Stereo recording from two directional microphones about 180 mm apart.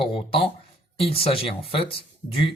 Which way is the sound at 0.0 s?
30° left (ahead or behind).